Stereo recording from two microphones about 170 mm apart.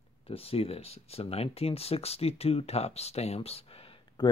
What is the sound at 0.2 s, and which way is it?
Speech, 35° left (ahead or behind).